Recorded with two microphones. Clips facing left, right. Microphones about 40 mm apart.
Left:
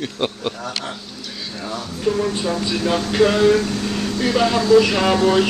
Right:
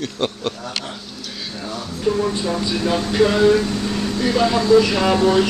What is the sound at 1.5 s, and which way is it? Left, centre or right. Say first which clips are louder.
Speech: left 1 dB; centre.